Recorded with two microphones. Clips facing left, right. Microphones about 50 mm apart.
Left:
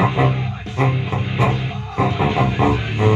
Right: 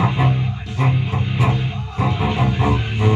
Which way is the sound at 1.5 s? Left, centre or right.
Left.